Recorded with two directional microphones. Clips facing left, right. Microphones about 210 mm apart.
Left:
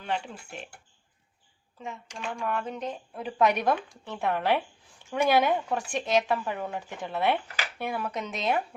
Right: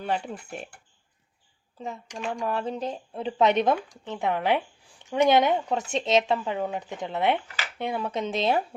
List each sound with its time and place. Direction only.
0.0 s speech: 40° right (ahead or behind)
1.8 s speech: 35° right (ahead or behind)